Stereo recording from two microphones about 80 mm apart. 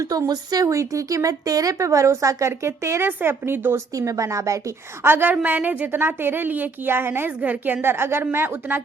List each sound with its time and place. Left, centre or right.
0.0 s a woman's voice: right
3.9 s a woman's voice: right
5.0 s a woman's voice: right
5.3 s a woman's voice: centre